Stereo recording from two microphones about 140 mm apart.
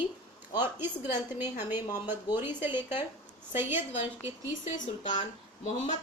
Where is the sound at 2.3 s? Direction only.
15° right (ahead or behind).